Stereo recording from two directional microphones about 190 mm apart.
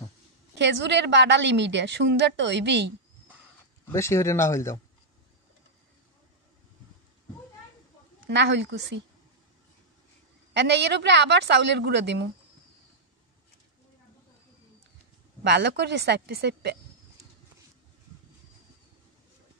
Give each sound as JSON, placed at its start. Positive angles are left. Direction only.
{"t": 0.6, "sound": "a woman's voice", "side_deg": -65}
{"t": 3.8, "sound": "speech", "side_deg": 15}
{"t": 8.3, "sound": "a woman's voice", "side_deg": -70}
{"t": 10.5, "sound": "speech", "side_deg": -65}
{"t": 15.4, "sound": "speech", "side_deg": -65}